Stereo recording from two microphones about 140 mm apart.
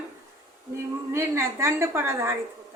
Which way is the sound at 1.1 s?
20° right (ahead or behind).